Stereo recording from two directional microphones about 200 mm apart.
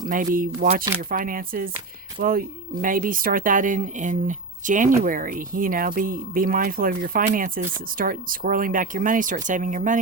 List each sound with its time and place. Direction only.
0.0 s speech: 40° right (ahead or behind)